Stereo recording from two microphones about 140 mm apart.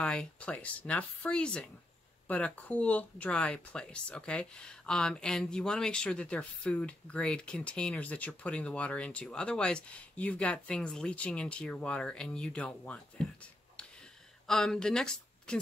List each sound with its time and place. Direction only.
0.0 s speech: 5° left (ahead or behind)
14.5 s speech: 5° left (ahead or behind)